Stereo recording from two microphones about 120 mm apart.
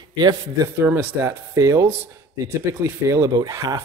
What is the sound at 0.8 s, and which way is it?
A man's voice, 15° right (ahead or behind).